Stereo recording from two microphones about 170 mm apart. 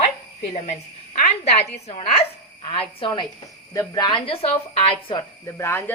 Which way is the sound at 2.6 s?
35° left (ahead or behind).